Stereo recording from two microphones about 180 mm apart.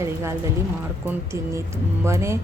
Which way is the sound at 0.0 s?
15° right (ahead or behind).